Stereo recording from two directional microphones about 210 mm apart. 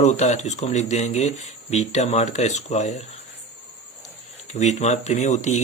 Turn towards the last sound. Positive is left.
turn(degrees=35)  # may be behind; listen again after turning